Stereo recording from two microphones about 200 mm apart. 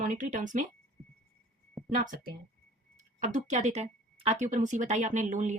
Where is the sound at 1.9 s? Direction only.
40° right (ahead or behind).